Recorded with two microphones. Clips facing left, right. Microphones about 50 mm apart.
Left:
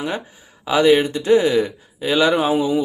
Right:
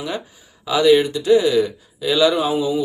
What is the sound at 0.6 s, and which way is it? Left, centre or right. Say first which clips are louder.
Speech: even; left.